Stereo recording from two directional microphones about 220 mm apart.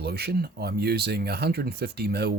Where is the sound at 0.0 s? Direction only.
45° right (ahead or behind).